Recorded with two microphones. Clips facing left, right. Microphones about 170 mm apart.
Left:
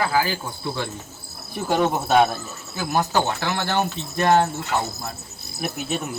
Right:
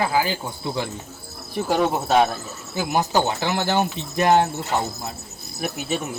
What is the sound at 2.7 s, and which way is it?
Speech, 15° right (ahead or behind).